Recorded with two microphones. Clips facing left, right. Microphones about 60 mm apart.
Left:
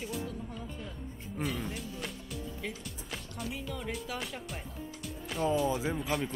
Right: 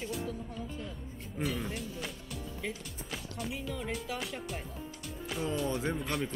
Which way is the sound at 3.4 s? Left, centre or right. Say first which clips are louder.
Right 1 dB; centre.